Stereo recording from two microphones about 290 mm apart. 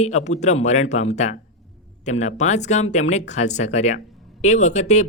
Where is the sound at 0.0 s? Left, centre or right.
Left.